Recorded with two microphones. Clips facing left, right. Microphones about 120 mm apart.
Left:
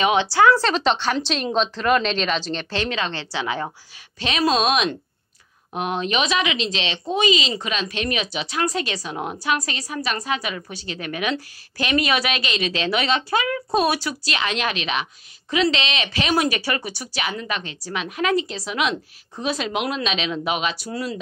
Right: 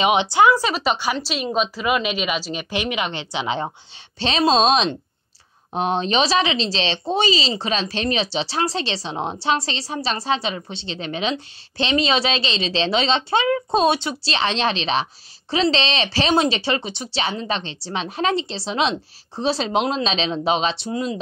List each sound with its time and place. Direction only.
0.0 s speech: 20° right (ahead or behind)